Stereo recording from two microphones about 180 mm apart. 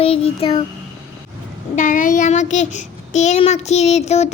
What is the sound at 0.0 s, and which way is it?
Speech, 35° left (ahead or behind).